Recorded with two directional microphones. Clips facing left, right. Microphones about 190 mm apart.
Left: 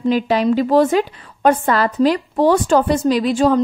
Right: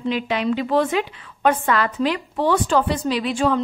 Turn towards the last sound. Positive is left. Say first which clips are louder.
# left 6 dB
turn(degrees=40)  # may be behind; listen again after turning